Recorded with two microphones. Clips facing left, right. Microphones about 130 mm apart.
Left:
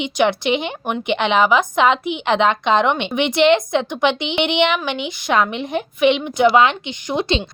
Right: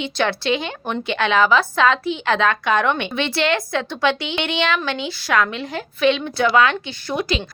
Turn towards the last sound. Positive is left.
turn(degrees=25)  # may be behind; listen again after turning